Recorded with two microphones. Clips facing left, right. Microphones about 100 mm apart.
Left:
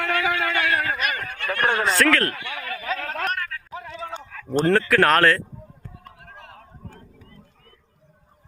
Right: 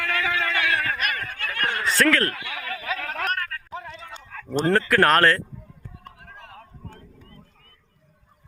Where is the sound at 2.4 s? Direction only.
25° left (ahead or behind).